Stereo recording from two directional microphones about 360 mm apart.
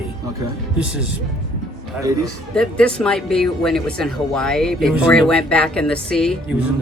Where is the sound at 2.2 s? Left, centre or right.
Centre.